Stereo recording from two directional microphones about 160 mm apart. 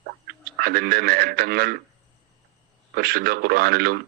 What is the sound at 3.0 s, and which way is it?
Speech, 75° right (ahead or behind).